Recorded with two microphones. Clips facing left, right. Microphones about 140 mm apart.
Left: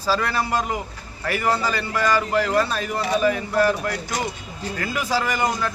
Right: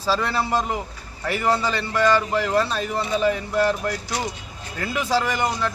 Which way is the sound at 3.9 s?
50° left (ahead or behind).